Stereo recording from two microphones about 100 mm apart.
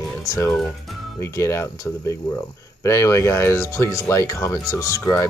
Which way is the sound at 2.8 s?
30° left (ahead or behind).